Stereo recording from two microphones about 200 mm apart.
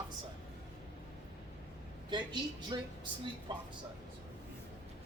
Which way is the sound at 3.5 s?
25° right (ahead or behind).